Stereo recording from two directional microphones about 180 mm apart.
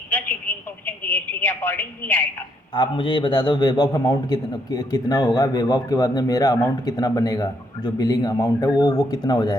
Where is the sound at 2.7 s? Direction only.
25° left (ahead or behind).